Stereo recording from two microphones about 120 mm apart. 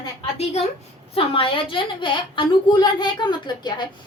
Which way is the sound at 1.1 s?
50° left (ahead or behind).